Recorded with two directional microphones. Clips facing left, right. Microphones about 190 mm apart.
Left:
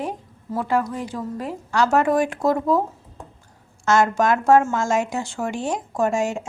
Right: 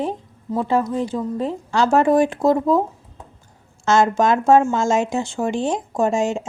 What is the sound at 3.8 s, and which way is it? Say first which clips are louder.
A woman's voice: right 2 dB; 25° right (ahead or behind).